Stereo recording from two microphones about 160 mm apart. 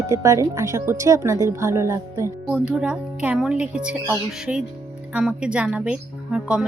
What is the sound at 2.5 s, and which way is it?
Speech, 5° right (ahead or behind).